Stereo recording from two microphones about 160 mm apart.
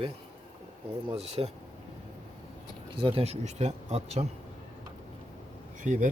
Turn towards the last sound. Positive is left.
turn(degrees=-50)  # may be behind; listen again after turning